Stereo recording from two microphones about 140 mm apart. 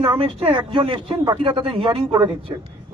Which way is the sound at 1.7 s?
40° right (ahead or behind).